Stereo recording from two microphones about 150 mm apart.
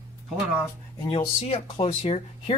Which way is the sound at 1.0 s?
35° left (ahead or behind).